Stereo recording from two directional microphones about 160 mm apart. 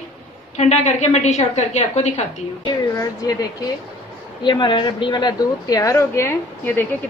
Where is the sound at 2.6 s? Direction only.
25° left (ahead or behind).